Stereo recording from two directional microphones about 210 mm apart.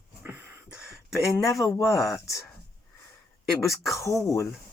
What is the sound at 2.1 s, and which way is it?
Speech, 15° left (ahead or behind).